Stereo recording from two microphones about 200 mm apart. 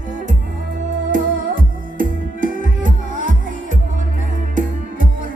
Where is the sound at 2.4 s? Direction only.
45° right (ahead or behind).